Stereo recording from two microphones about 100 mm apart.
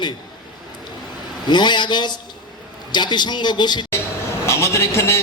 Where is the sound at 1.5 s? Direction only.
50° left (ahead or behind).